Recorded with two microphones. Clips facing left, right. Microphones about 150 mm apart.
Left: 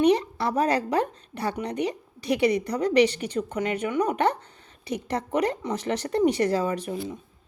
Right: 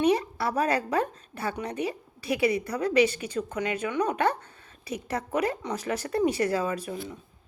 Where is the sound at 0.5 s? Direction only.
35° left (ahead or behind).